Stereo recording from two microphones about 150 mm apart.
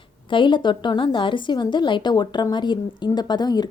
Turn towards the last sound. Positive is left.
turn(degrees=30)  # may be behind; listen again after turning